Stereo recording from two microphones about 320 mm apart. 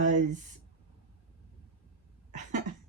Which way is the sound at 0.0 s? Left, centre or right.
Right.